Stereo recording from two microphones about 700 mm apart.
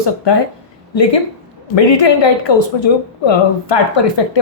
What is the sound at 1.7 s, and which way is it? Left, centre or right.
A woman's voice, left.